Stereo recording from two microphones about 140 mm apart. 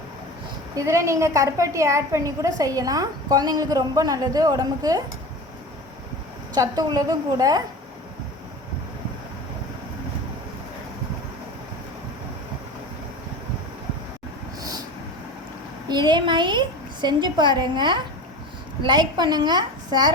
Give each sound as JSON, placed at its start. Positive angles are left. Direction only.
{"t": 0.8, "sound": "a woman's voice", "side_deg": -20}
{"t": 6.5, "sound": "a woman's voice", "side_deg": -25}
{"t": 15.9, "sound": "a woman's voice", "side_deg": -30}